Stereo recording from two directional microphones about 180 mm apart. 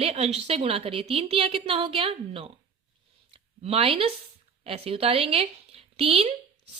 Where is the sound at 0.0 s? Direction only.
35° right (ahead or behind).